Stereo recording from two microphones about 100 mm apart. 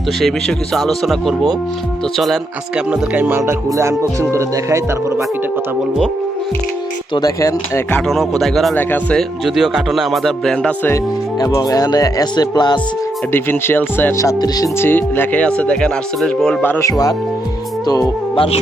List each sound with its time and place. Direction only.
0.2 s speech: centre (ahead or behind)
2.9 s music: 15° right (ahead or behind)
7.1 s speech: 40° left (ahead or behind)
8.0 s speech: 5° left (ahead or behind)
8.7 s speech: 20° left (ahead or behind)
9.1 s speech: 5° right (ahead or behind)
11.3 s speech: 40° left (ahead or behind)
13.3 s speech: 20° left (ahead or behind)
14.2 s speech: 35° left (ahead or behind)
14.8 s speech: 20° left (ahead or behind)
16.6 s speech: 20° left (ahead or behind)
16.8 s speech: 35° left (ahead or behind)
18.3 s speech: 75° left (ahead or behind)